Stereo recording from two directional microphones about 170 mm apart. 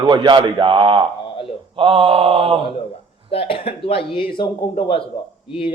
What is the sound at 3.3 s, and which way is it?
Speech, 35° left (ahead or behind).